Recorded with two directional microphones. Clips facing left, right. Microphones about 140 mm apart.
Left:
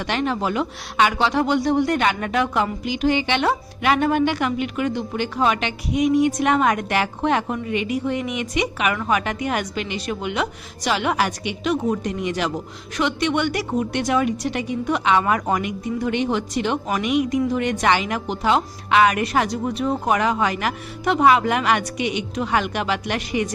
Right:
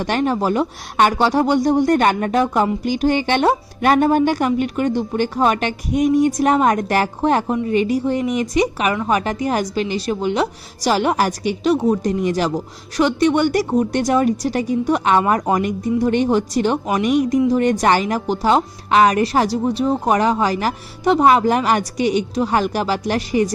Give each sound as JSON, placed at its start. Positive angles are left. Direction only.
{"t": 0.0, "sound": "a woman's voice", "side_deg": -40}